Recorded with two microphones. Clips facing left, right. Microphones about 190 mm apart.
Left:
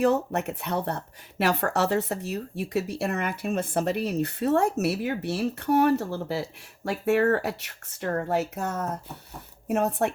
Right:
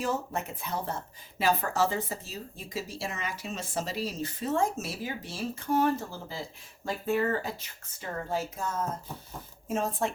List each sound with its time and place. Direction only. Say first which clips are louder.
0.0 s speech: left 8 dB; 65° left (ahead or behind)